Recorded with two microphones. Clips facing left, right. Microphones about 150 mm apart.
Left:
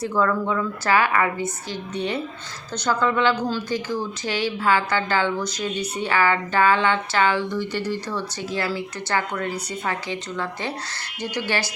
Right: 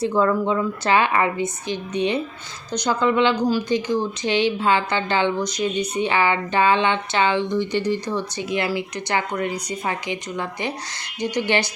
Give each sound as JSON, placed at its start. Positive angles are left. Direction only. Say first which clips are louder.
{"t": 0.0, "sound": "a woman's voice", "louder": "right 3 dB", "side_deg": -20}